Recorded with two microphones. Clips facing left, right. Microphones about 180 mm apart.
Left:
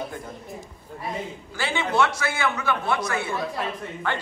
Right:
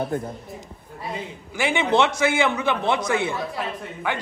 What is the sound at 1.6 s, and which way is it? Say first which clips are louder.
A man's voice: right 3 dB; 20° right (ahead or behind).